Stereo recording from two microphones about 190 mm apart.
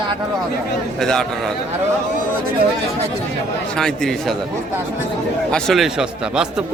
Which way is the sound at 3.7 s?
5° left (ahead or behind).